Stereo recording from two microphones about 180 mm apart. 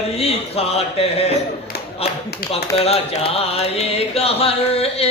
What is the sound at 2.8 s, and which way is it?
A man's voice, 35° left (ahead or behind).